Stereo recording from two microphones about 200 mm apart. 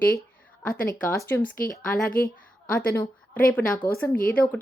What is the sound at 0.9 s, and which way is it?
Speech, 15° left (ahead or behind).